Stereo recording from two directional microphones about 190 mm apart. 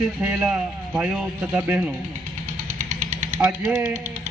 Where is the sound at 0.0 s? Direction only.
5° right (ahead or behind).